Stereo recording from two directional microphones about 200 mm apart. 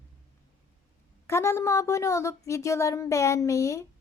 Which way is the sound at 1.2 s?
15° left (ahead or behind).